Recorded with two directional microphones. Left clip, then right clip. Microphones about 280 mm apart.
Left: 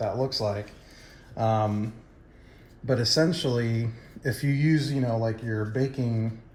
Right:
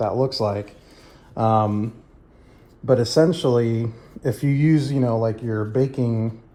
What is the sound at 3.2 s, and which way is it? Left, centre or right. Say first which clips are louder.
Speech: right 8 dB; right.